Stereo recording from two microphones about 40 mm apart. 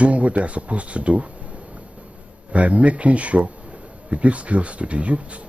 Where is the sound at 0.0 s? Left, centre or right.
Right.